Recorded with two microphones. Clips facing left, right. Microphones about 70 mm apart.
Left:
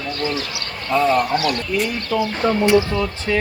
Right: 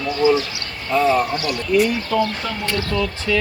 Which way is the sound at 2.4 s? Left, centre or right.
Left.